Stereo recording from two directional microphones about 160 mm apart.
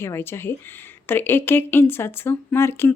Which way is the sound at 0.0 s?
15° left (ahead or behind).